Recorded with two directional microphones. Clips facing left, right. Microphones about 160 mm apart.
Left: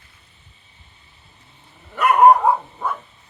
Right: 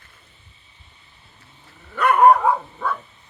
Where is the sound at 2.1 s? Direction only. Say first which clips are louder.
Left 2 dB; 15° left (ahead or behind).